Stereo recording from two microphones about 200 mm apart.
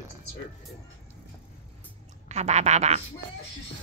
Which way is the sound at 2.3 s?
35° right (ahead or behind).